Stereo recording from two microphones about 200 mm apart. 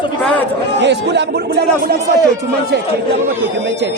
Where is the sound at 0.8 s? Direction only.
60° right (ahead or behind).